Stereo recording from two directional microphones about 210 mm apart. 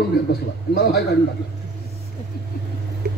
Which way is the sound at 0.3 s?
50° left (ahead or behind).